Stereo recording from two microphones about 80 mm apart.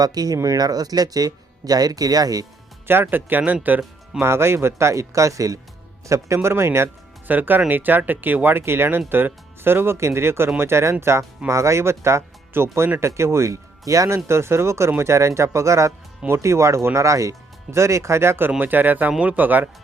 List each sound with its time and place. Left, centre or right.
0.0 s speech: right
2.8 s speech: right
4.2 s speech: right